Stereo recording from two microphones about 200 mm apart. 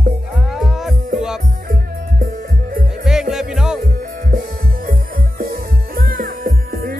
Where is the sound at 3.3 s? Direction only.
Centre (ahead or behind).